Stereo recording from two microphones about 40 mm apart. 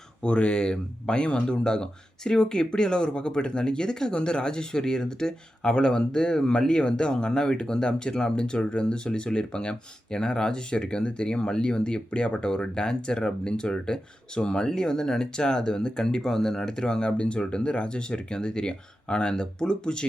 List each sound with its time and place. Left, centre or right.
0.2 s speech: left